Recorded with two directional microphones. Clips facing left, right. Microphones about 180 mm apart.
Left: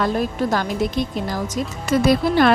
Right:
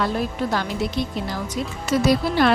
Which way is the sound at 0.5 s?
45° left (ahead or behind).